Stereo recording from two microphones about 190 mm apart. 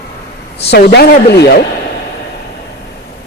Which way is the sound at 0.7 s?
60° left (ahead or behind).